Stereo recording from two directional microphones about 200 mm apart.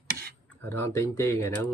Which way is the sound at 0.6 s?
10° left (ahead or behind).